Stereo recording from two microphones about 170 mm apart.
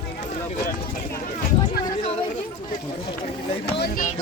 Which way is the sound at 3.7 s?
60° left (ahead or behind).